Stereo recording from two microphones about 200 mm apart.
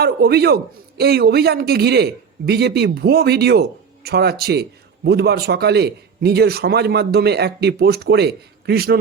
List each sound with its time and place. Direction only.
0.0 s a man's voice: 50° right (ahead or behind)